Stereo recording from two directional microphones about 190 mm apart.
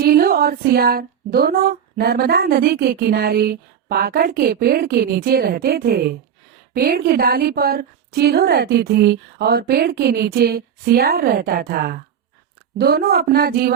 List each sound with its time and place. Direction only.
0.0 s speech: 55° right (ahead or behind)